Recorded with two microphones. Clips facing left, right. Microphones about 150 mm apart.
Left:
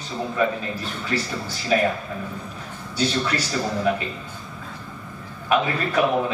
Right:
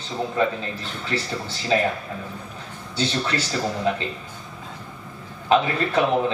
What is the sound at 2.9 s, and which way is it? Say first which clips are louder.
Speech: left 1 dB; 25° right (ahead or behind).